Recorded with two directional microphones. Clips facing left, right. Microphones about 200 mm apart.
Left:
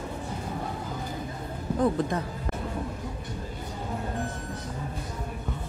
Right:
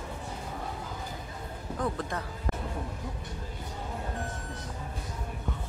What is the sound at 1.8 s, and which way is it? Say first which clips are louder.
Speech: left 7 dB; 20° left (ahead or behind).